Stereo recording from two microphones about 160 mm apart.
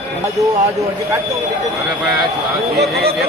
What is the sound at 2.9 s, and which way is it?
Speech, 80° right.